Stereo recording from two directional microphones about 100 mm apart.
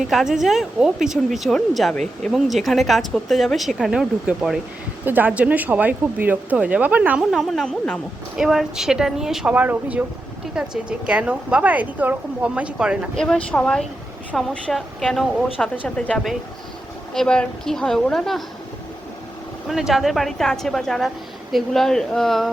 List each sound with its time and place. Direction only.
0.1 s speech: centre (ahead or behind)
5.0 s a woman's voice: 15° right (ahead or behind)
7.3 s speech: centre (ahead or behind)
8.4 s speech: 5° right (ahead or behind)
9.6 s a woman's voice: 15° right (ahead or behind)
13.1 s speech: 5° left (ahead or behind)
15.5 s speech: 15° left (ahead or behind)
19.6 s speech: 5° right (ahead or behind)